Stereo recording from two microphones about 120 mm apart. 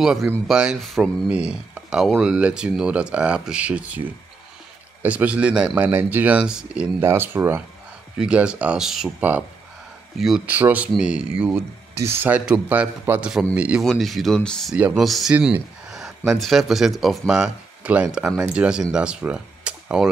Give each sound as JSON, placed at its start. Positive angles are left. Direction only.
{"t": 0.0, "sound": "speech", "side_deg": -5}
{"t": 10.5, "sound": "speech", "side_deg": -15}
{"t": 11.5, "sound": "speech", "side_deg": -20}
{"t": 13.8, "sound": "speech", "side_deg": 0}